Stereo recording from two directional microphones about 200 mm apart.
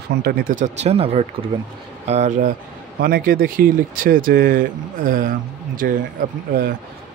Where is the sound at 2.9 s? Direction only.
45° right (ahead or behind).